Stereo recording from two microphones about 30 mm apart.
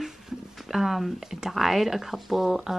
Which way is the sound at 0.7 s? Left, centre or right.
Centre.